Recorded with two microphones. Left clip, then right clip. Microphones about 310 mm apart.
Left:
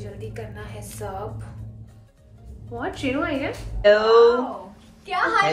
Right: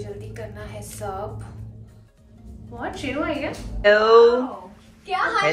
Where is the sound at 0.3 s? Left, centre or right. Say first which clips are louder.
Right 1 dB; centre.